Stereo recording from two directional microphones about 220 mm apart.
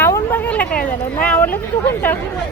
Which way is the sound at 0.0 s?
10° left (ahead or behind).